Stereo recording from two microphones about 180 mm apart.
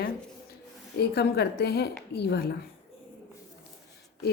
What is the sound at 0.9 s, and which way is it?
A woman's voice, 65° left (ahead or behind).